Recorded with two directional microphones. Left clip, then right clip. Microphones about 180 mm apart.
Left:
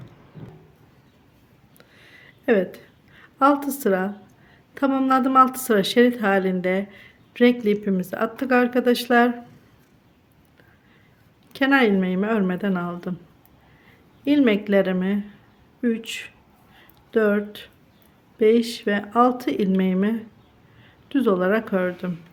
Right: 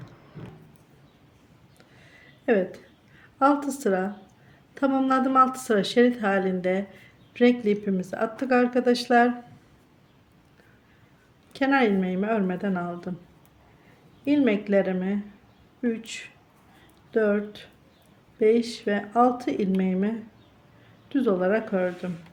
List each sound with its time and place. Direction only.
1.8 s a sound: 20° left (ahead or behind)
4.7 s a woman's voice: 20° left (ahead or behind)
11.5 s a woman's voice: 20° left (ahead or behind)
14.3 s a woman's voice: 25° left (ahead or behind)